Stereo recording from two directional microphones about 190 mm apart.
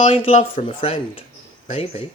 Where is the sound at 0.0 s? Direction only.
30° left (ahead or behind).